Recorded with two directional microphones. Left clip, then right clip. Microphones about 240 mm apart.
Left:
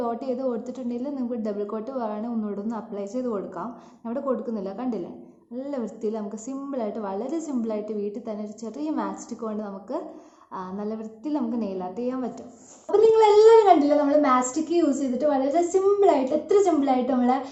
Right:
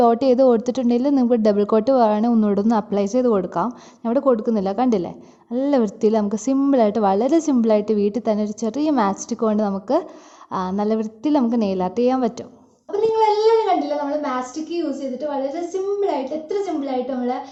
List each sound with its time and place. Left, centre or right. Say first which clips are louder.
0.0 s a woman's voice: right 13 dB; right
12.9 s a woman's voice: left 1 dB; centre